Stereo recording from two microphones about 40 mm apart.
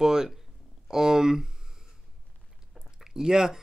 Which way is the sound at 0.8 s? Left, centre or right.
Centre.